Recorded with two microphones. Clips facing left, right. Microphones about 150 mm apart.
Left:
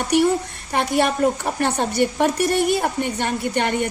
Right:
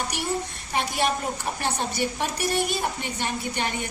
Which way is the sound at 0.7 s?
55° left (ahead or behind).